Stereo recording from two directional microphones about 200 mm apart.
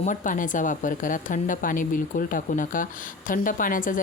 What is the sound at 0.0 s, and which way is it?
A woman's voice, 40° left (ahead or behind).